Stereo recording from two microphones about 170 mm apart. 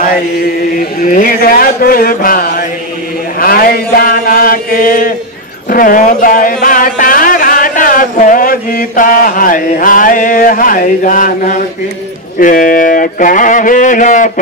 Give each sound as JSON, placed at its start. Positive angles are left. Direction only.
{"t": 0.0, "sound": "chant", "side_deg": 55}
{"t": 5.7, "sound": "a sound", "side_deg": 55}
{"t": 12.4, "sound": "speech", "side_deg": 55}